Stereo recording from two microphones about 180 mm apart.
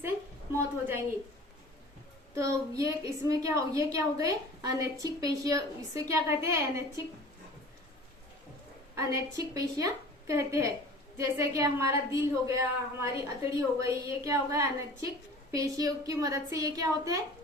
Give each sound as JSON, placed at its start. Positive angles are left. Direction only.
{"t": 0.5, "sound": "a sound", "side_deg": -10}
{"t": 2.3, "sound": "a woman's voice", "side_deg": -15}
{"t": 9.0, "sound": "a woman's voice", "side_deg": -15}